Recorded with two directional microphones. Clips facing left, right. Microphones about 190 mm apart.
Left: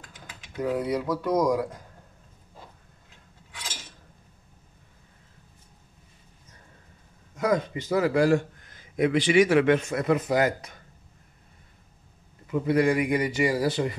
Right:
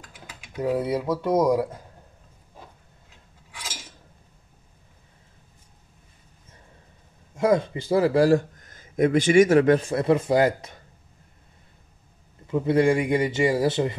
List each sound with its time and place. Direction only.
0.7 s a man's voice: 25° right (ahead or behind)
7.3 s a man's voice: 25° right (ahead or behind)
12.4 s a man's voice: 25° right (ahead or behind)